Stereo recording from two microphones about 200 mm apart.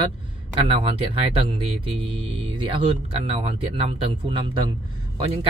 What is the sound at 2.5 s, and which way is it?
Speech, 25° right (ahead or behind).